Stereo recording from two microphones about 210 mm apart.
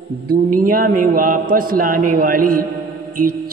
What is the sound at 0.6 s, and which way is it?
A man's voice, 45° right (ahead or behind).